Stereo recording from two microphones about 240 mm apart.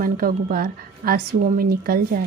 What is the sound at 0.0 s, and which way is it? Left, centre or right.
Speech, right.